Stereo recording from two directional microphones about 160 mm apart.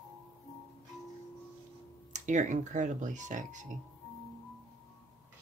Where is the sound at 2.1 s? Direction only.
50° right (ahead or behind).